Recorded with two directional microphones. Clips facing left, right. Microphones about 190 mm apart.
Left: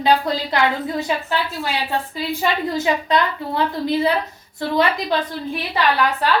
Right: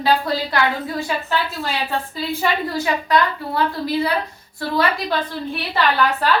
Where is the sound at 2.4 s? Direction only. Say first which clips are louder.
Left 1 dB; 20° left (ahead or behind).